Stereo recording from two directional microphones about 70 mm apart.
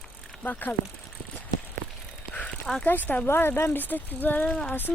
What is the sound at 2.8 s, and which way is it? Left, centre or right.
Speech, left.